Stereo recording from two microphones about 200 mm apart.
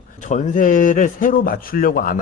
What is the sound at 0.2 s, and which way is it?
A man's voice, 40° left (ahead or behind).